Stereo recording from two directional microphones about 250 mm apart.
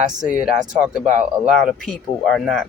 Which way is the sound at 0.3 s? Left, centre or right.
Centre.